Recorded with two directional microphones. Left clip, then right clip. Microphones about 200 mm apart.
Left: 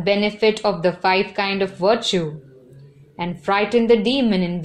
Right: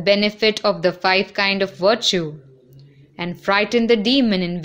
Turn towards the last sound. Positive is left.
turn(degrees=-35)  # may be behind; listen again after turning